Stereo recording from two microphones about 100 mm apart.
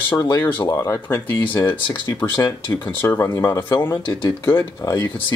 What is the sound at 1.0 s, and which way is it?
Speech, 20° left (ahead or behind).